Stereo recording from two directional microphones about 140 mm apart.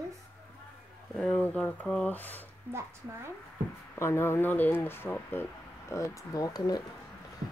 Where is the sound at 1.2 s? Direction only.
10° left (ahead or behind).